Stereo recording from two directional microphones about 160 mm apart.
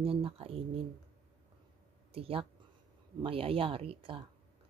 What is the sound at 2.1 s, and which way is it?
Speech, 35° right (ahead or behind).